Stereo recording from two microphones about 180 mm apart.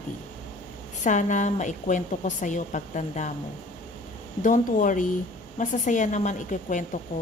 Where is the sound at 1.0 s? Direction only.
45° left (ahead or behind).